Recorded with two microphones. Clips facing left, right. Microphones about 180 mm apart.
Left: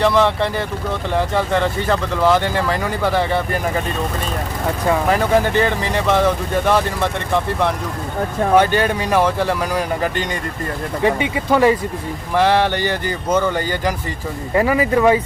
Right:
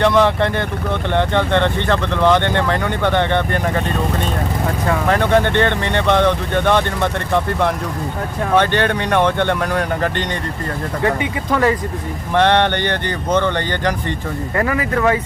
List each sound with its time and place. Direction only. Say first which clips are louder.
0.0 s speech: right 1 dB; centre (ahead or behind)
4.9 s speech: even; 5° left (ahead or behind)
11.5 s speech: left 3 dB; 15° left (ahead or behind)
12.3 s speech: right 1 dB; 5° left (ahead or behind)
14.5 s speech: left 4 dB; 20° left (ahead or behind)